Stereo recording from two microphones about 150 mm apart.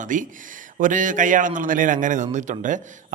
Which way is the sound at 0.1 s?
60° right (ahead or behind).